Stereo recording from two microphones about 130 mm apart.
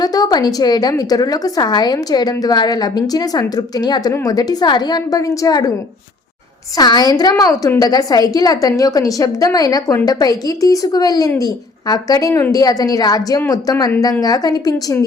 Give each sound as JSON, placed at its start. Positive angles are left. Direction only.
{"t": 0.0, "sound": "a woman's voice", "side_deg": 30}
{"t": 6.7, "sound": "a woman's voice", "side_deg": 30}